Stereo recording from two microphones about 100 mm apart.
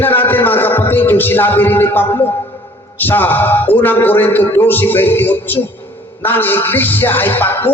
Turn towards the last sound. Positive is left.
turn(degrees=20)  # may be behind; listen again after turning